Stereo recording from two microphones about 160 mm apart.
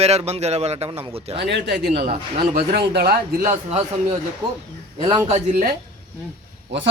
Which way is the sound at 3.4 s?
45° right (ahead or behind).